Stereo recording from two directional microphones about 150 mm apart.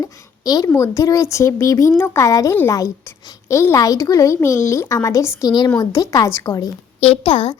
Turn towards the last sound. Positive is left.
turn(degrees=40)  # may be behind; listen again after turning